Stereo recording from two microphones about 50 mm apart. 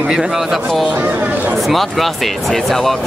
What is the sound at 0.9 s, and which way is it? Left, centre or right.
Speech, right.